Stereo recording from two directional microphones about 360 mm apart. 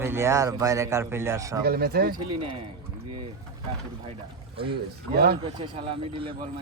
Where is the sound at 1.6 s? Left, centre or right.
Right.